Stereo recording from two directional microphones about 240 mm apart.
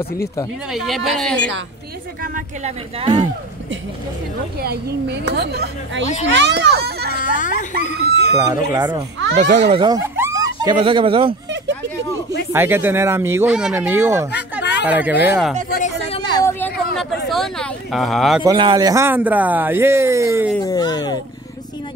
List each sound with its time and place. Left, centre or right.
0.0 s speech: centre
0.7 s speech: centre
2.2 s speech: right
4.6 s a child's voice: right
7.2 s a child's voice: left
8.4 s speech: centre
9.3 s speech: right
11.5 s a sound: right
12.5 s speech: centre
14.6 s a sound: left
14.9 s speech: centre
16.4 s a sound: centre
18.4 s speech: centre
20.6 s a sound: centre